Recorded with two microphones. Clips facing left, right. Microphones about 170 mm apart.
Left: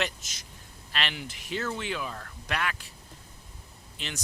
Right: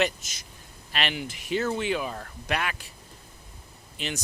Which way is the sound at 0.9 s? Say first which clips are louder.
Right 4 dB; 10° right (ahead or behind).